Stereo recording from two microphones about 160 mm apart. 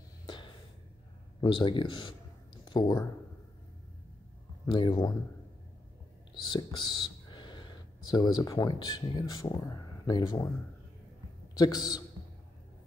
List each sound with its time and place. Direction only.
1.4 s a sound: 30° left (ahead or behind)
4.6 s a man's voice: 30° left (ahead or behind)
6.5 s speech: 30° left (ahead or behind)
11.5 s a man's voice: 25° left (ahead or behind)